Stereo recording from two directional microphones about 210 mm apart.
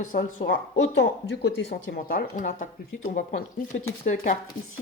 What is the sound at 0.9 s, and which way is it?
Speech, 55° left (ahead or behind).